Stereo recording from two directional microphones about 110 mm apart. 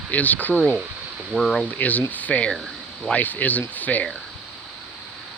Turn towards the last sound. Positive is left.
turn(degrees=15)  # may be behind; listen again after turning